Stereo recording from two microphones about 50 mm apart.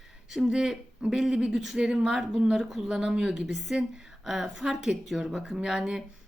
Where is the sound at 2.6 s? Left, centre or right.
Centre.